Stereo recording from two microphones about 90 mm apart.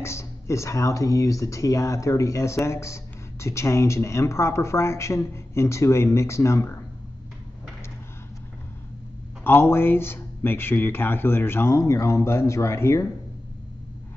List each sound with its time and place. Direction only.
0.0 s speech: 30° left (ahead or behind)
9.4 s speech: 25° left (ahead or behind)